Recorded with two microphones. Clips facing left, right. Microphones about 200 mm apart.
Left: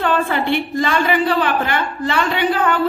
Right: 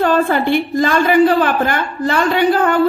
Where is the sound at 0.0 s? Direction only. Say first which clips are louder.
Right 4 dB; 40° right (ahead or behind).